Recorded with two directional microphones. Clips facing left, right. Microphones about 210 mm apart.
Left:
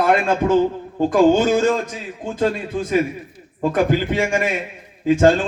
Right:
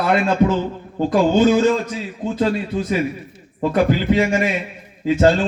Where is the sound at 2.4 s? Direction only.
50° left (ahead or behind).